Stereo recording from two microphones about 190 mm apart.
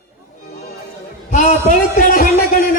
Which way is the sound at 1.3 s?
40° left (ahead or behind).